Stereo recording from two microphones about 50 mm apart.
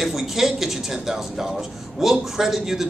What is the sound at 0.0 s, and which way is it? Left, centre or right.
Speech, centre.